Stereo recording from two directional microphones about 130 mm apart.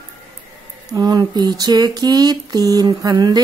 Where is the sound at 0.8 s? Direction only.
30° right (ahead or behind).